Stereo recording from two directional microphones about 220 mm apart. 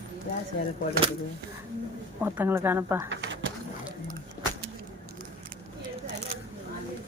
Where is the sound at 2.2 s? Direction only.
10° right (ahead or behind).